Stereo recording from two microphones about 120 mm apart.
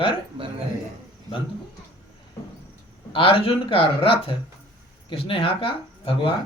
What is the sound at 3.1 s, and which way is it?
A man's voice, 50° left (ahead or behind).